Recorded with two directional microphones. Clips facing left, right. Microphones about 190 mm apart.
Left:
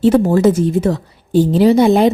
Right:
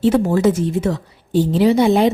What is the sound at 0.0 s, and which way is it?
A woman's voice, 40° left (ahead or behind).